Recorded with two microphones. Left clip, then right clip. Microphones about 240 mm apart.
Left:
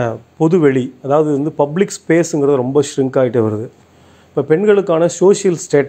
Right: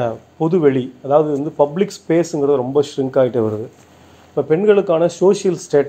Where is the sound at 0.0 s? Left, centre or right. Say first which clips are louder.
Left 3 dB; left.